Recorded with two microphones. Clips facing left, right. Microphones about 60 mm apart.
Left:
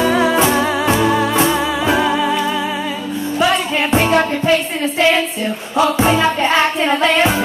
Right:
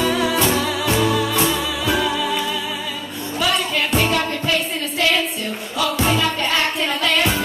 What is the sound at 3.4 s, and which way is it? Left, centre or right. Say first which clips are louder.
Music: left 3 dB; left.